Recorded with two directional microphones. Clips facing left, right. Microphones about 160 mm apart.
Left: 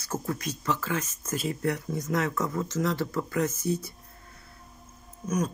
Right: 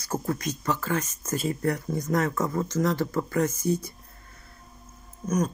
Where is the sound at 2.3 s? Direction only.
20° right (ahead or behind).